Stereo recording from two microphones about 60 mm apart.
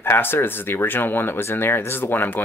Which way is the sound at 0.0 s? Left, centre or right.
Left.